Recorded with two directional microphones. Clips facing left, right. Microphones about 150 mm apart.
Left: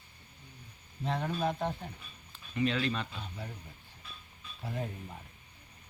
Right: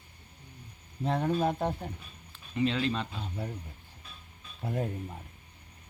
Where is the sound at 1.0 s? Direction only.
40° right (ahead or behind).